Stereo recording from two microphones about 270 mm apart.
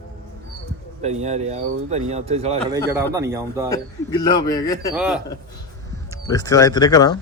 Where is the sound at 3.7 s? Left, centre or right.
Centre.